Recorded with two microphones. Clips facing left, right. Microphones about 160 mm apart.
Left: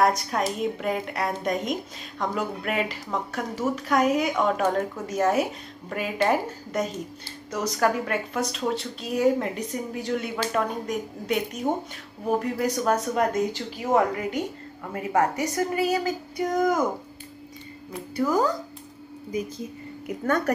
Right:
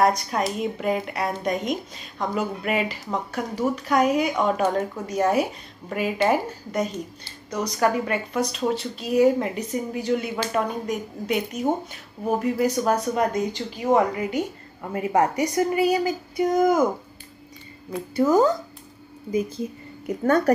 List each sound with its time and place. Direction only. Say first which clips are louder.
0.0 s speech: right 1 dB; centre (ahead or behind)
14.9 s speech: right 2 dB; 20° right (ahead or behind)
18.1 s speech: right 5 dB; 25° right (ahead or behind)
20.2 s a woman's voice: right 5 dB; 35° right (ahead or behind)